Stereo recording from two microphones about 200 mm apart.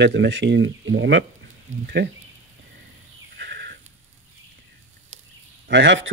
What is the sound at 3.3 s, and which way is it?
Goat, 55° right (ahead or behind).